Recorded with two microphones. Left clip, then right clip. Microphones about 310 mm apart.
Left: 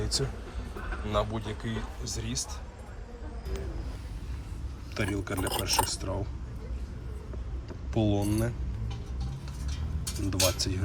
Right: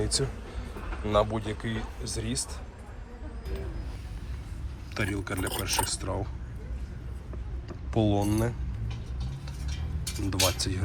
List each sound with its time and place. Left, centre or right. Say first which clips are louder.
0.0 s speech: right 2 dB; centre
4.9 s speech: even; centre
7.9 s speech: right 2 dB; centre
10.2 s speech: right 1 dB; centre